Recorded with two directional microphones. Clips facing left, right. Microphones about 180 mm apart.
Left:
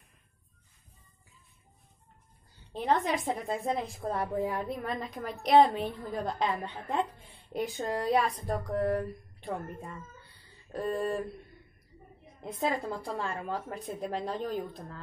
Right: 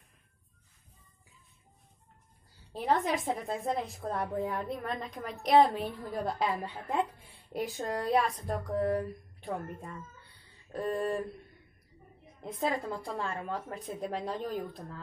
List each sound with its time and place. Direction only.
2.7 s a woman's voice: centre (ahead or behind)
12.4 s a woman's voice: centre (ahead or behind)